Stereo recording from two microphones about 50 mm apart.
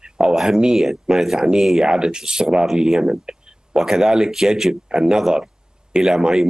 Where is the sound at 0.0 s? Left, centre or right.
Centre.